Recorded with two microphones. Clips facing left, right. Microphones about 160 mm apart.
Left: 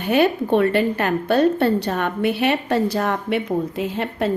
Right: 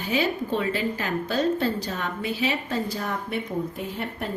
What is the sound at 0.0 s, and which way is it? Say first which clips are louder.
A woman's voice: left 8 dB; 60° left (ahead or behind).